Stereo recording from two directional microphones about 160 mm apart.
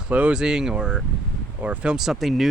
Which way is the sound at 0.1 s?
10° right (ahead or behind).